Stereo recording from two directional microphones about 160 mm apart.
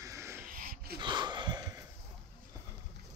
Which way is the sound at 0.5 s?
65° right (ahead or behind).